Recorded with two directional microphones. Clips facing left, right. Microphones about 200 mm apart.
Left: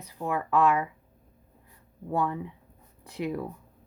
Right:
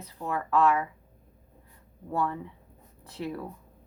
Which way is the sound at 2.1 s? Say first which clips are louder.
Left 2 dB; 15° left (ahead or behind).